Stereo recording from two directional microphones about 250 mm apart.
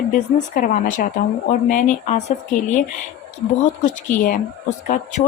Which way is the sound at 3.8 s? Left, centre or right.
Left.